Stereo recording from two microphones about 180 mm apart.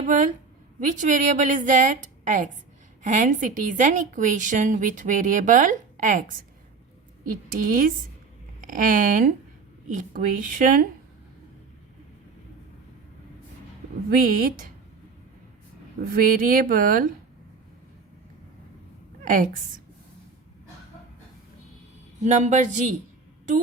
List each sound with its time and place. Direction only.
0.0 s a woman's voice: 45° right (ahead or behind)
7.5 s a woman's voice: 50° right (ahead or behind)
14.1 s a woman's voice: 50° right (ahead or behind)
16.0 s a woman's voice: 50° right (ahead or behind)
19.2 s a woman's voice: 45° right (ahead or behind)
22.2 s a woman's voice: 40° right (ahead or behind)